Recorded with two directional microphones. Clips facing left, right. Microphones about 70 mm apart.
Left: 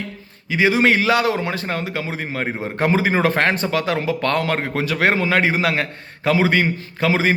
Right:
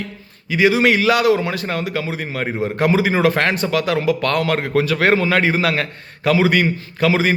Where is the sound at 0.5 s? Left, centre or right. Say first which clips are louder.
Right 1 dB; left.